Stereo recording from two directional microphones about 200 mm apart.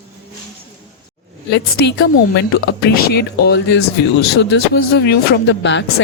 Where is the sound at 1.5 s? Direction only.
55° left (ahead or behind).